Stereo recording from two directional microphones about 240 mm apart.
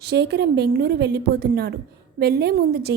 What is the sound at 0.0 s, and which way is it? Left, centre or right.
A woman's voice, right.